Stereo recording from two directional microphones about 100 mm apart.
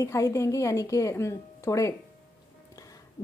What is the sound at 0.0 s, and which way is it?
A woman's voice, 30° left (ahead or behind).